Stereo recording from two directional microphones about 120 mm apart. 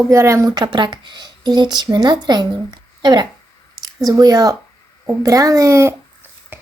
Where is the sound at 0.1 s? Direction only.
25° right (ahead or behind).